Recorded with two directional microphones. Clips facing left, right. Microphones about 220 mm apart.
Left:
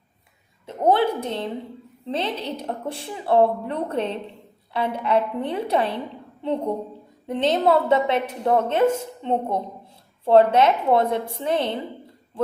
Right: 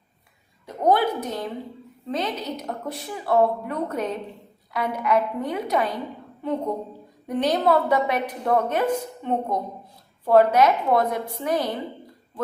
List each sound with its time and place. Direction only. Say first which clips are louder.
0.6 s a sound: left 1 dB; 25° left (ahead or behind)
2.0 s a woman's voice: left 1 dB; 30° left (ahead or behind)
7.3 s a woman's voice: left 1 dB; 25° left (ahead or behind)